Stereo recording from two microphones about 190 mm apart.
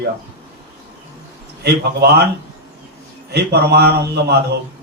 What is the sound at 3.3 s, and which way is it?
A man's voice, 60° right (ahead or behind).